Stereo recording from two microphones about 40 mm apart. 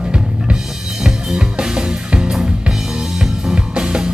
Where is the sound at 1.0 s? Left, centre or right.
Centre.